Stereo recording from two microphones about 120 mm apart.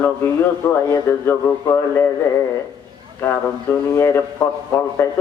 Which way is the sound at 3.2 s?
20° left (ahead or behind).